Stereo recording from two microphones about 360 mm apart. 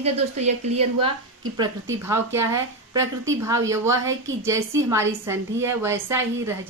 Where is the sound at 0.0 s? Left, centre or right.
Centre.